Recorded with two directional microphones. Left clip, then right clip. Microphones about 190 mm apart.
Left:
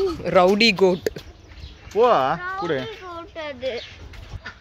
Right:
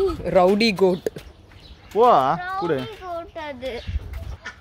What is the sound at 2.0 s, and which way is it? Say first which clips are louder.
Speech: right 2 dB; 50° right (ahead or behind).